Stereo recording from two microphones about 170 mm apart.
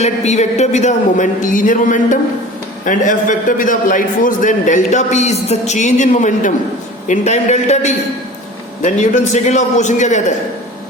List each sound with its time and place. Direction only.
0.0 s a man's voice: 40° left (ahead or behind)